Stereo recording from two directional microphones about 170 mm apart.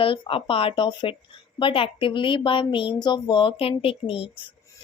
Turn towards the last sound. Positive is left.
turn(degrees=35)  # may be behind; listen again after turning